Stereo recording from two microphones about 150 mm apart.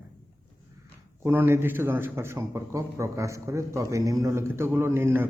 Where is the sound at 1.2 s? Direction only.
15° right (ahead or behind).